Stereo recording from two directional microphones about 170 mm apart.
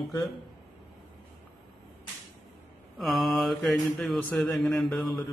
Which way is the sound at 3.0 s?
Centre (ahead or behind).